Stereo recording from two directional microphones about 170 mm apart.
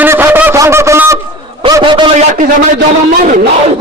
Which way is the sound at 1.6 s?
25° right (ahead or behind).